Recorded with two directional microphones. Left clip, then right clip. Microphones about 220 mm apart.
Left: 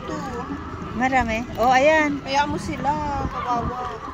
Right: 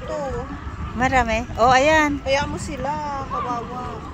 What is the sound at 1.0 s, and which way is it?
Speech, 15° right (ahead or behind).